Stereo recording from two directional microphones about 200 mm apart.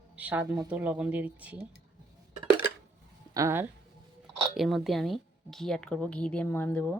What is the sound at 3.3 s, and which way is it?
Speech, 15° right (ahead or behind).